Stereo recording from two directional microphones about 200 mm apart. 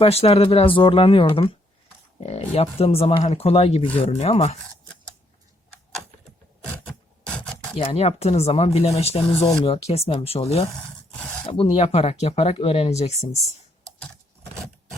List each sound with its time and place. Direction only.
0.0 s speech: 30° left (ahead or behind)
6.7 s filing: 5° left (ahead or behind)
7.7 s speech: 30° left (ahead or behind)